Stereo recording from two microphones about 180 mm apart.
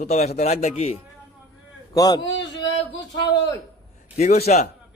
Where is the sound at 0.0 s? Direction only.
35° left (ahead or behind).